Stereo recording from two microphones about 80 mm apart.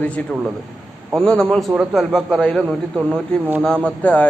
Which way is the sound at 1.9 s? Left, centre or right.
Centre.